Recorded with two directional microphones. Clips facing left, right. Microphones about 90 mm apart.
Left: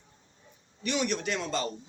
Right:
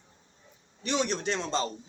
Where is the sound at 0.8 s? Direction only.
35° right (ahead or behind).